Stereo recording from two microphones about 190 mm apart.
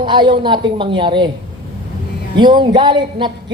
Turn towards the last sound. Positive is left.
turn(degrees=-25)  # may be behind; listen again after turning